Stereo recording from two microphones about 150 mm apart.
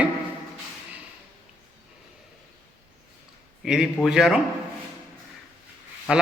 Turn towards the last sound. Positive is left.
turn(degrees=-5)  # may be behind; listen again after turning